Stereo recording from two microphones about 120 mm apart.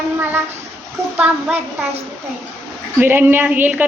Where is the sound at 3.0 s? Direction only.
15° right (ahead or behind).